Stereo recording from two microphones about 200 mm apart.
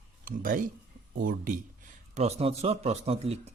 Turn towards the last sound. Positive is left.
turn(degrees=-30)  # may be behind; listen again after turning